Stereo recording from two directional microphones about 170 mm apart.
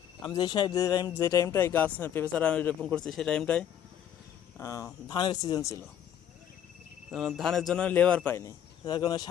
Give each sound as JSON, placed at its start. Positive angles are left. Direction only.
{"t": 0.3, "sound": "speech", "side_deg": 25}
{"t": 4.5, "sound": "speech", "side_deg": 20}
{"t": 7.1, "sound": "speech", "side_deg": 0}